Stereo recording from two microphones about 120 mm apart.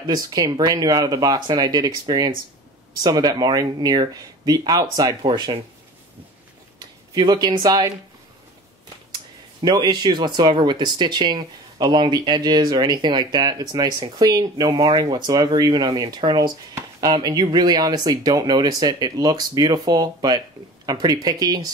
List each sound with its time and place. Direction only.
0.0 s speech: 35° right (ahead or behind)
7.2 s speech: 35° right (ahead or behind)
9.1 s speech: 35° right (ahead or behind)